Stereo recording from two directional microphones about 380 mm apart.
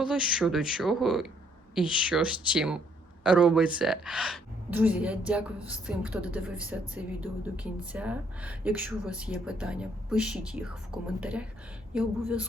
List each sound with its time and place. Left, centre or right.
0.0 s a woman's voice: centre